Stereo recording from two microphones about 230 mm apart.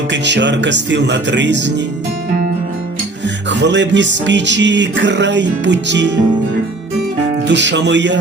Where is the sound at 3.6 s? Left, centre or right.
Right.